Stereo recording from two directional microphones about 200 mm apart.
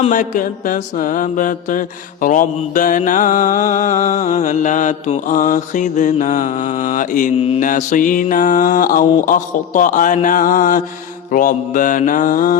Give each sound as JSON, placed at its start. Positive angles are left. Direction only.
{"t": 0.0, "sound": "mantra", "side_deg": 40}